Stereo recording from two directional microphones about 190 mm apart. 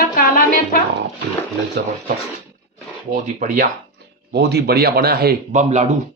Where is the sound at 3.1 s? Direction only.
45° right (ahead or behind).